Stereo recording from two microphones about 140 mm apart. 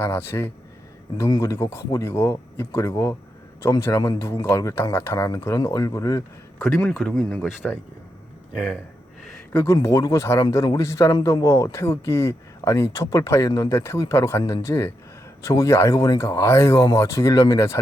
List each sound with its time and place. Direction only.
0.0 s a man's voice: 15° left (ahead or behind)
7.0 s speech: centre (ahead or behind)
9.5 s a man's voice: 15° left (ahead or behind)